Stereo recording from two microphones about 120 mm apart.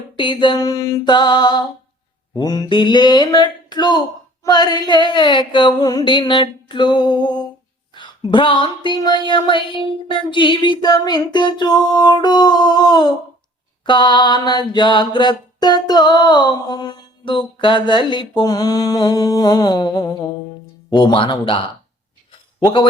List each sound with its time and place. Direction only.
0.2 s mantra: 40° left (ahead or behind)
20.9 s speech: 45° left (ahead or behind)
22.6 s mantra: 35° left (ahead or behind)